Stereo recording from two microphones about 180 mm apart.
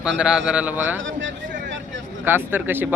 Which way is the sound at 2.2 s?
10° right (ahead or behind).